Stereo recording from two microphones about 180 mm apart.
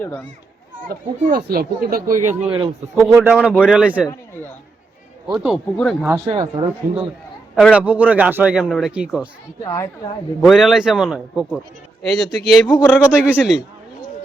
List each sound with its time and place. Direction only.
0.9 s speech: 55° right (ahead or behind)
2.5 s a man's voice: 30° right (ahead or behind)
2.9 s a man's voice: 15° right (ahead or behind)
3.3 s a man's voice: 5° left (ahead or behind)
3.6 s a man's voice: 5° right (ahead or behind)
5.3 s a man's voice: centre (ahead or behind)
6.1 s a man's voice: 15° right (ahead or behind)
7.5 s a man's voice: 5° right (ahead or behind)
9.6 s a woman's voice: 15° left (ahead or behind)
10.4 s a man's voice: centre (ahead or behind)